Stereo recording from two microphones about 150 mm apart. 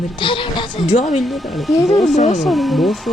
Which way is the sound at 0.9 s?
50° left (ahead or behind).